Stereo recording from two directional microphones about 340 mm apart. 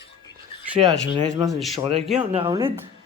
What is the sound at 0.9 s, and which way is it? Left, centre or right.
Speech, left.